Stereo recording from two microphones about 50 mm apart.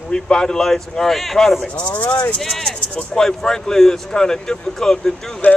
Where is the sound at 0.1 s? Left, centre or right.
Centre.